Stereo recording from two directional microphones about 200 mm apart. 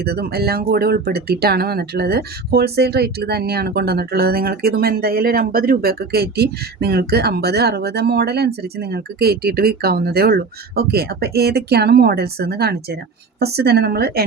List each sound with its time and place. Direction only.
0.0 s speech: 50° right (ahead or behind)